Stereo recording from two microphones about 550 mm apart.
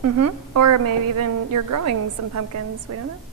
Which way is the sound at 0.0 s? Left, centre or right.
Right.